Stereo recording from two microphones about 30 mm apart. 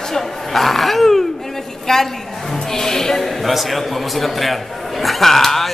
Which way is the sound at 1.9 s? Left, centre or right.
Centre.